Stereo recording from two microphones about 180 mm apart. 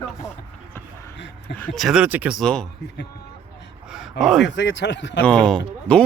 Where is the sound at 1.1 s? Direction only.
80° left.